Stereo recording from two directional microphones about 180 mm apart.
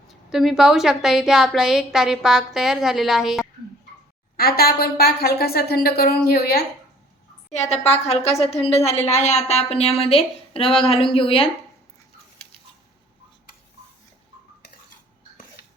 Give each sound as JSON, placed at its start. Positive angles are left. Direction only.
{"t": 0.1, "sound": "a woman's voice", "side_deg": 0}
{"t": 4.4, "sound": "a woman's voice", "side_deg": 55}
{"t": 7.5, "sound": "a woman's voice", "side_deg": 40}